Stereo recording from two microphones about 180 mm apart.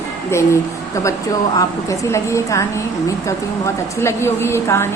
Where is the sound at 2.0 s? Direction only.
15° left (ahead or behind).